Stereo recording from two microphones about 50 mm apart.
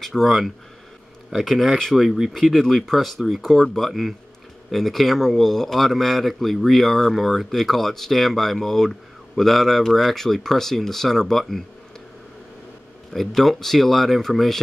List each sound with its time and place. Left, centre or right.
0.0 s speech: centre
1.3 s a man's voice: centre
13.1 s a man's voice: centre